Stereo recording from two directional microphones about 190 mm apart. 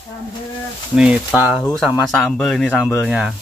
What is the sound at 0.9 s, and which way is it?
Speech, 5° right (ahead or behind).